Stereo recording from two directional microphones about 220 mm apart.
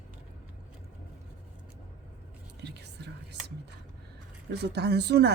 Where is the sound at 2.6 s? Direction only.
50° right (ahead or behind).